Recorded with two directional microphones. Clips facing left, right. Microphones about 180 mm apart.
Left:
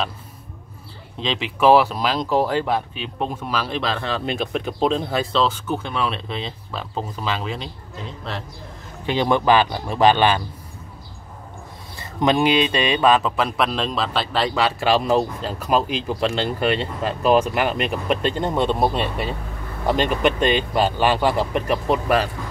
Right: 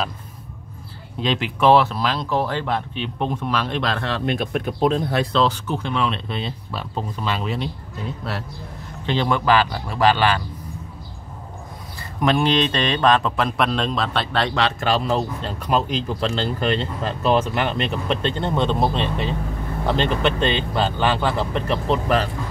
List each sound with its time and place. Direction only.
1.2 s speech: centre (ahead or behind)
9.0 s speech: 15° left (ahead or behind)
12.0 s speech: 20° left (ahead or behind)